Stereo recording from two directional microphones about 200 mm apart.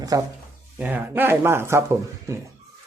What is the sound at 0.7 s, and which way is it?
Speech, 10° right (ahead or behind).